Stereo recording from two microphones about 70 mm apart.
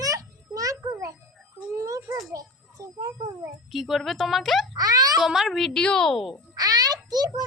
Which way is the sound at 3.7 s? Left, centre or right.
Centre.